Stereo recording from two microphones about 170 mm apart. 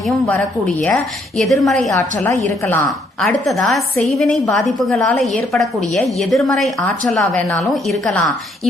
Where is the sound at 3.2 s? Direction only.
Centre (ahead or behind).